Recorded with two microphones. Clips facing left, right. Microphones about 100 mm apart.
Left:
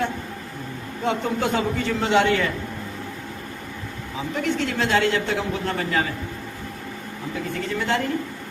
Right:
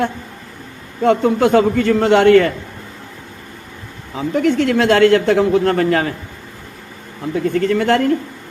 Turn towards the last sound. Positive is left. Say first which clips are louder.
# right 10 dB
turn(degrees=-60)  # may be behind; listen again after turning